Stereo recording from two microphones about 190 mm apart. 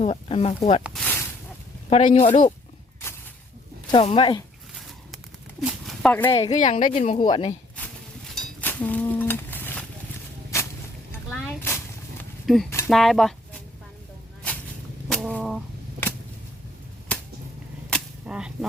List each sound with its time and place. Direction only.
0.0 s speech: 30° left (ahead or behind)
0.8 s speech: 5° right (ahead or behind)
1.9 s speech: 30° left (ahead or behind)
3.9 s speech: 30° left (ahead or behind)
5.1 s a sound: centre (ahead or behind)
6.5 s speech: 40° left (ahead or behind)
7.2 s speech: 25° left (ahead or behind)
8.3 s a sound: 5° left (ahead or behind)
12.5 s speech: centre (ahead or behind)
15.1 s a sound: centre (ahead or behind)
17.1 s a sound: 5° left (ahead or behind)
17.9 s cap gun: 5° right (ahead or behind)